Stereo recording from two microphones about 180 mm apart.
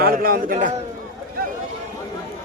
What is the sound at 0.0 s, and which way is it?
Speech, 55° right (ahead or behind).